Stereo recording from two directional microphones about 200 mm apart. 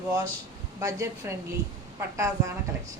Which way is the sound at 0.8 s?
15° right (ahead or behind).